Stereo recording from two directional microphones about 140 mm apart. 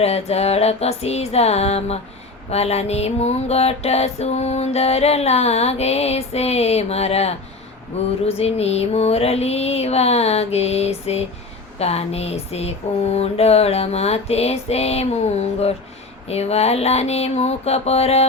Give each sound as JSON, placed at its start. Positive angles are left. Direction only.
{"t": 0.0, "sound": "music", "side_deg": 50}